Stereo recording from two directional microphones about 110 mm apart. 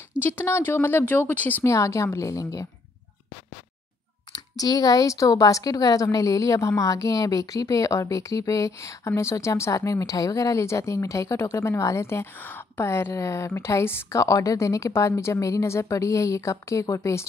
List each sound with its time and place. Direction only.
0.4 s a woman's voice: 20° left (ahead or behind)
1.6 s a woman's voice: 25° left (ahead or behind)
4.3 s a woman's voice: 35° left (ahead or behind)